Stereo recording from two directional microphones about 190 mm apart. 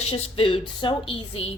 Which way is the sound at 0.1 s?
30° left (ahead or behind).